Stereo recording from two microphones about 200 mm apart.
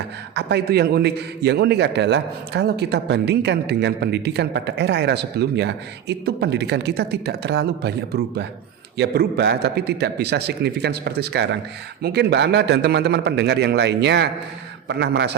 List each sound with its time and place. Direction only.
0.3 s a man's voice: 55° right (ahead or behind)